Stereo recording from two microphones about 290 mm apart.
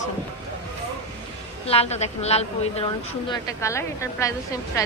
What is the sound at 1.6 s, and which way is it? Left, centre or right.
A woman's voice, left.